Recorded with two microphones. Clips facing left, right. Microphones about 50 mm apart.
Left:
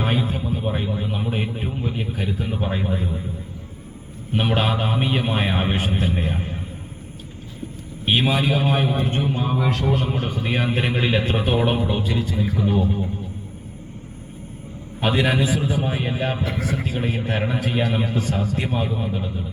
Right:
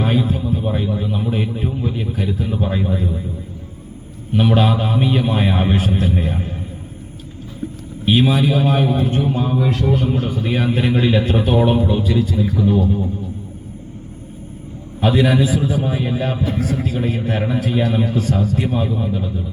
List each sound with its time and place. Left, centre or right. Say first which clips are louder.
0.0 s a sound: right 4 dB; centre
0.3 s a sound: right 4 dB; left
4.4 s a man's voice: right 5 dB; centre
8.0 s a man's voice: right 4 dB; left
15.0 s a man's voice: right 4 dB; left
16.5 s a man's voice: right 4 dB; left; by 19.3 s centre